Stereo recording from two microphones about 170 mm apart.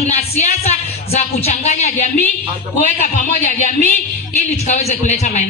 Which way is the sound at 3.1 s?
45° left (ahead or behind).